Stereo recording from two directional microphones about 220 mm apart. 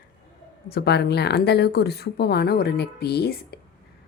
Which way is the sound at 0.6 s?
45° left (ahead or behind).